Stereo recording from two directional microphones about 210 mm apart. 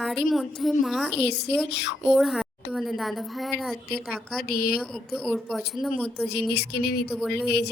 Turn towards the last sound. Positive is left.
turn(degrees=0)  # may be behind; listen again after turning